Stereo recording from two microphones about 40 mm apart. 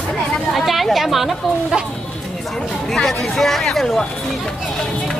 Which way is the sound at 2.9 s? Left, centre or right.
Centre.